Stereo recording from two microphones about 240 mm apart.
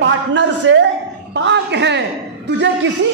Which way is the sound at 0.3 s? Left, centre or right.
Right.